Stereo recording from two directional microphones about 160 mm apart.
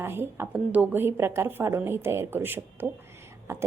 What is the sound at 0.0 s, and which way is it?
A woman's voice, 15° right (ahead or behind).